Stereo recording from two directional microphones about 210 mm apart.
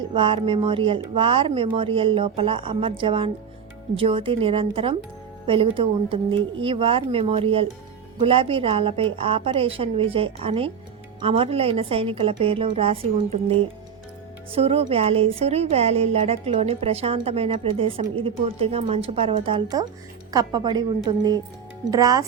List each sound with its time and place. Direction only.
0.1 s speech: 25° right (ahead or behind)